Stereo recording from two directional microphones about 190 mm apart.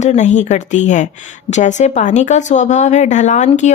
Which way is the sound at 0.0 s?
40° left (ahead or behind).